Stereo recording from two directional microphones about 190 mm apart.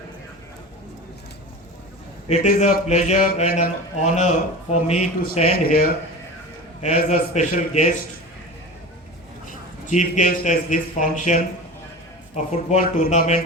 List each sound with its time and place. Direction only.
2.3 s speech: 40° left (ahead or behind)
5.5 s speech: 50° left (ahead or behind)
6.8 s speech: 40° left (ahead or behind)
9.5 s a man's voice: 40° left (ahead or behind)